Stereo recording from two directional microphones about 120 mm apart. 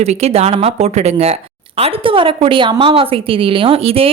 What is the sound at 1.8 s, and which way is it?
A woman's voice, 45° right (ahead or behind).